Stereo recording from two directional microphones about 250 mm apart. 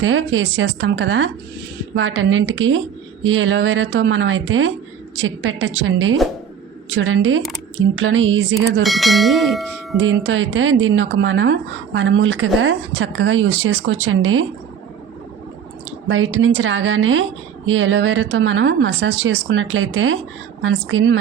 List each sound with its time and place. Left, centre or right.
0.0 s speech: right
8.5 s bell: centre
10.0 s speech: right
16.0 s speech: right